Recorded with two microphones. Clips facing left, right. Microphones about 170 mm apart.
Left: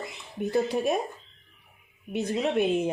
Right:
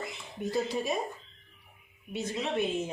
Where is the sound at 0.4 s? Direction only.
60° left (ahead or behind).